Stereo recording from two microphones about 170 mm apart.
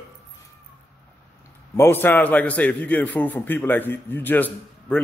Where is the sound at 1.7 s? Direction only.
15° left (ahead or behind).